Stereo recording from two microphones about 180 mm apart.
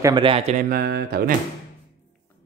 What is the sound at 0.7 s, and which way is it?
Speech, 60° right (ahead or behind).